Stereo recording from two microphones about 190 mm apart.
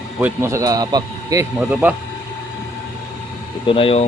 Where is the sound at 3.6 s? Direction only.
30° left (ahead or behind).